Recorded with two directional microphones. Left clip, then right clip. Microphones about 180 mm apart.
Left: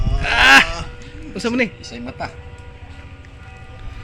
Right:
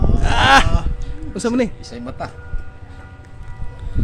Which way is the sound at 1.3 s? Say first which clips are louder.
Right 1 dB; 20° right (ahead or behind).